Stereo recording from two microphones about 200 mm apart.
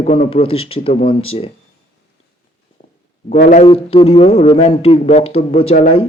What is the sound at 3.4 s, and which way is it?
Speech, 40° left (ahead or behind).